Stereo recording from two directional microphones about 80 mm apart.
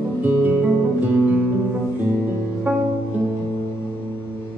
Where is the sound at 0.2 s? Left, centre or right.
Right.